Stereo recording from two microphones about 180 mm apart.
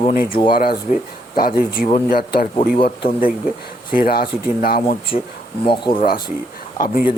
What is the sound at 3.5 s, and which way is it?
Speech, 50° left (ahead or behind).